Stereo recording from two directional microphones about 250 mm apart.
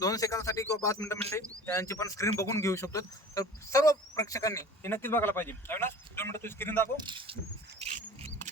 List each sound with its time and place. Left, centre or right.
0.0 s speech: centre
6.9 s speech: centre
7.8 s wild animals: right